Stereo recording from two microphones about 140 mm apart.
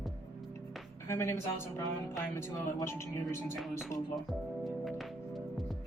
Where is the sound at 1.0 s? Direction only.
20° left (ahead or behind).